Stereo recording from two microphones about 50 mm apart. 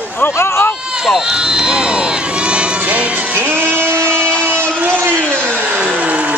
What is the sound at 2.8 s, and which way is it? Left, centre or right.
Music, right.